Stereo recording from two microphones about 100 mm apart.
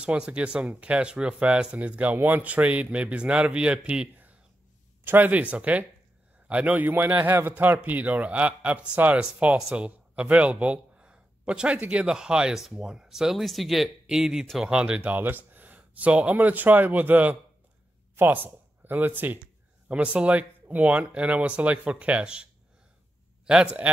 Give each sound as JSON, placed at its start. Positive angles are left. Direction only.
{"t": 0.0, "sound": "a man's voice", "side_deg": -10}